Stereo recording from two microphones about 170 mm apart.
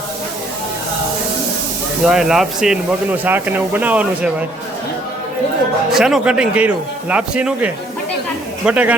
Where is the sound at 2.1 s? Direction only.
Centre (ahead or behind).